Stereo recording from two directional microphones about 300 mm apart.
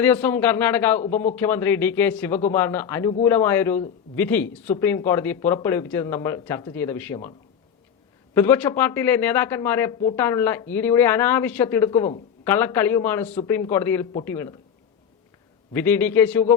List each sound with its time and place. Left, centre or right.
0.0 s speech: centre
3.1 s speech: centre
3.3 s speech: centre
15.7 s speech: centre